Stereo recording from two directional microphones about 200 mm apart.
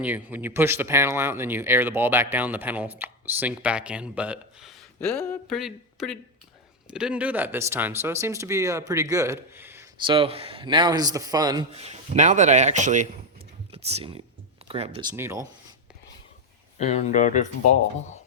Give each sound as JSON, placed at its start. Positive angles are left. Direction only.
{"t": 0.0, "sound": "speech", "side_deg": -10}
{"t": 10.0, "sound": "a man's voice", "side_deg": -25}
{"t": 11.7, "sound": "a man's voice", "side_deg": -30}
{"t": 15.1, "sound": "speech", "side_deg": -15}
{"t": 16.7, "sound": "speech", "side_deg": 35}